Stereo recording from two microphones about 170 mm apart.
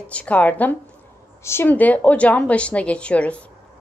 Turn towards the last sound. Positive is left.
turn(degrees=5)  # may be behind; listen again after turning